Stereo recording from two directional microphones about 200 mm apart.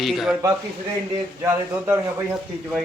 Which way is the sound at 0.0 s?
Centre (ahead or behind).